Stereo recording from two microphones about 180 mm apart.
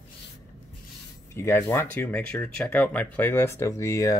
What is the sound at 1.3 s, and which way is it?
Speech, 15° left (ahead or behind).